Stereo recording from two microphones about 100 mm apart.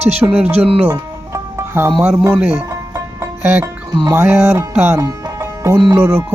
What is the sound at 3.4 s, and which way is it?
Music, 20° right (ahead or behind).